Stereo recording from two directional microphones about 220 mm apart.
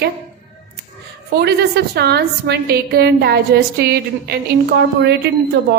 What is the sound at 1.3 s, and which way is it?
A woman's voice, 45° right (ahead or behind).